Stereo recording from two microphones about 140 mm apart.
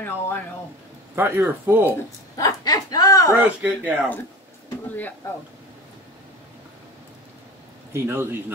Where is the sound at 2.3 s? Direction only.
25° left (ahead or behind).